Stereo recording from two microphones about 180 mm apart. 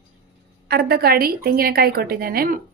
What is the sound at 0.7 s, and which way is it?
A woman's voice, 60° right (ahead or behind).